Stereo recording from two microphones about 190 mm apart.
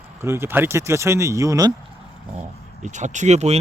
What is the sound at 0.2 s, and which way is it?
Speech, 15° right (ahead or behind).